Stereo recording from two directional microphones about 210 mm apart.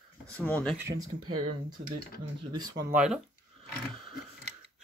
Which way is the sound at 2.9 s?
5° right (ahead or behind).